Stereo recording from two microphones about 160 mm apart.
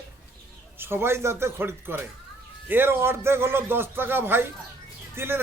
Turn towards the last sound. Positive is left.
turn(degrees=-15)  # may be behind; listen again after turning